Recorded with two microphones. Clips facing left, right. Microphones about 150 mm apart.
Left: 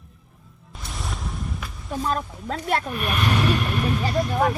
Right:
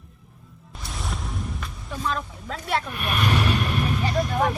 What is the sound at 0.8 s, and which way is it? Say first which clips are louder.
Music: even; centre (ahead or behind).